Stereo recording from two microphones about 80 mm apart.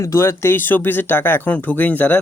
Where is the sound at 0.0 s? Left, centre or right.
Left.